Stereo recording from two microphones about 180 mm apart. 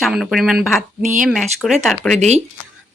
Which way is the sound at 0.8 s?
45° right (ahead or behind).